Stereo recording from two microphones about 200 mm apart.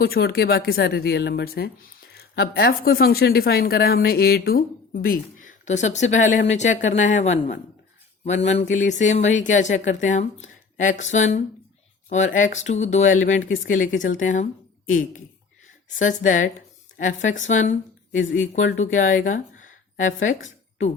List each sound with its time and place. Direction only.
0.0 s speech: 50° left (ahead or behind)
17.5 s speech: 40° left (ahead or behind)